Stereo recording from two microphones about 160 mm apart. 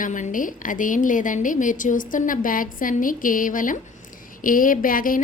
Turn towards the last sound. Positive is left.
turn(degrees=60)  # may be behind; listen again after turning